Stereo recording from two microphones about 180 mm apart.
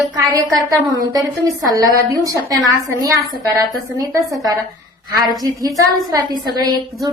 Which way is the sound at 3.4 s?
20° right (ahead or behind).